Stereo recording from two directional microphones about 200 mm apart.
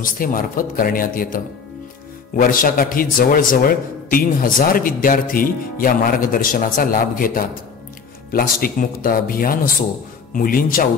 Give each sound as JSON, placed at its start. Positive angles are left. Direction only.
{"t": 0.0, "sound": "speech", "side_deg": 45}